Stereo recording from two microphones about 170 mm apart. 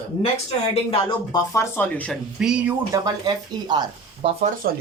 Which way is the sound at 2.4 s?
5° right (ahead or behind).